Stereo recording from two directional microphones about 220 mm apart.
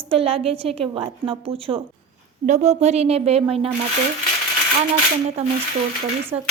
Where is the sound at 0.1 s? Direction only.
25° right (ahead or behind).